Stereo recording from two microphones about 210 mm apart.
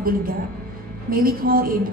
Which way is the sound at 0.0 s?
45° right (ahead or behind).